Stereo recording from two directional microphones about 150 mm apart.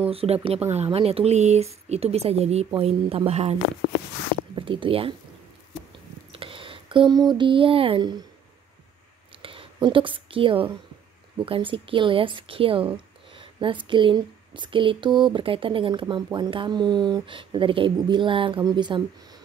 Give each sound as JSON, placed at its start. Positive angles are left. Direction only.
{"t": 0.1, "sound": "a woman's voice", "side_deg": -40}
{"t": 4.6, "sound": "speech", "side_deg": -35}
{"t": 6.3, "sound": "speech", "side_deg": -35}
{"t": 9.4, "sound": "a sound", "side_deg": -35}
{"t": 11.3, "sound": "a woman's voice", "side_deg": -35}